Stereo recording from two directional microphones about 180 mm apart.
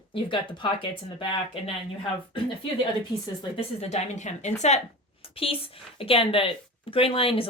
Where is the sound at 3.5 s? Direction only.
35° left (ahead or behind).